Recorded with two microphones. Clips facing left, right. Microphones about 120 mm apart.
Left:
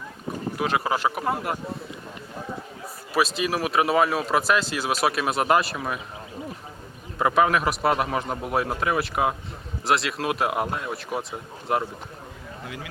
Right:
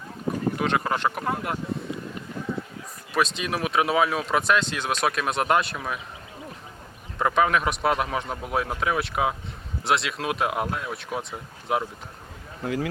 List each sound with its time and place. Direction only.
0.5 s speech: 5° left (ahead or behind)
3.2 s speech: 5° left (ahead or behind)
7.2 s speech: 5° left (ahead or behind)
12.6 s a man's voice: 45° right (ahead or behind)